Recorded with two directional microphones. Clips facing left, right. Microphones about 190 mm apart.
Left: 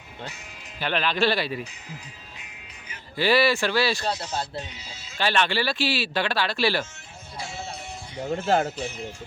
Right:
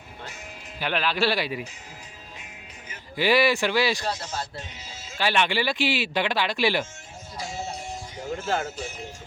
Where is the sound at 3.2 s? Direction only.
15° right (ahead or behind).